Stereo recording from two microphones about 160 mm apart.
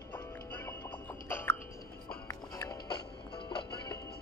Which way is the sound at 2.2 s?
20° left (ahead or behind).